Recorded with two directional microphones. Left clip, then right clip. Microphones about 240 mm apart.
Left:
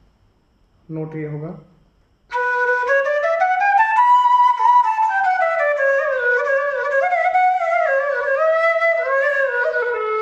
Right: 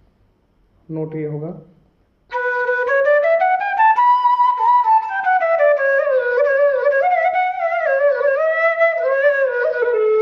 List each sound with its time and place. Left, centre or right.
0.9 s speech: centre
2.2 s flute: left